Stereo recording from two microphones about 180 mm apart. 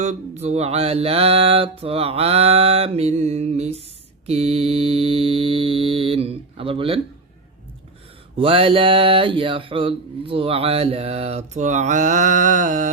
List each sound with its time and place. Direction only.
0.0 s speech: 40° right (ahead or behind)
8.4 s speech: 30° right (ahead or behind)